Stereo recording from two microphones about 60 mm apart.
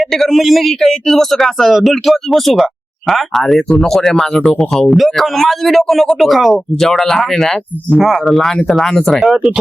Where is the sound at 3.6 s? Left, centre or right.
Centre.